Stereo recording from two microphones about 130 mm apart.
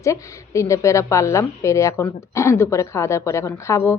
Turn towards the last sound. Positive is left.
turn(degrees=20)  # may be behind; listen again after turning